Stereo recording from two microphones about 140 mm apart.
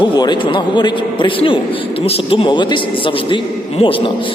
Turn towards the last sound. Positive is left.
turn(degrees=35)  # may be behind; listen again after turning